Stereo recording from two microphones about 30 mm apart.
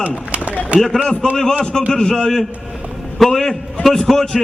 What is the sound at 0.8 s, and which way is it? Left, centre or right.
A man's voice, centre.